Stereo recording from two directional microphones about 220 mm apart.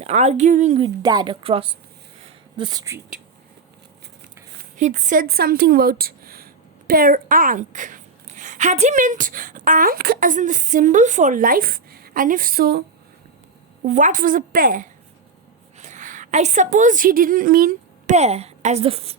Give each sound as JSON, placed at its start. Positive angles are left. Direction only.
{"t": 0.0, "sound": "speech", "side_deg": -30}
{"t": 1.0, "sound": "speech", "side_deg": -20}
{"t": 4.8, "sound": "a woman's voice", "side_deg": -35}
{"t": 13.8, "sound": "a woman's voice", "side_deg": -35}